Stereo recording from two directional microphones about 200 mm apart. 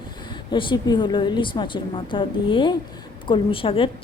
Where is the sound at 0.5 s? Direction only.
25° left (ahead or behind).